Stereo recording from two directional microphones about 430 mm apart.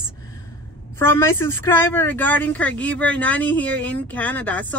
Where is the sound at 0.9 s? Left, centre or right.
Centre.